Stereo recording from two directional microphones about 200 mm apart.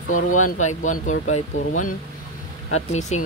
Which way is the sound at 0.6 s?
35° left (ahead or behind).